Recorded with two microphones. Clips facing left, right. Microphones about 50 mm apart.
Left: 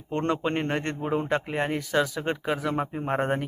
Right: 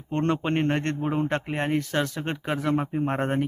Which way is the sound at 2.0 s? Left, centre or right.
Right.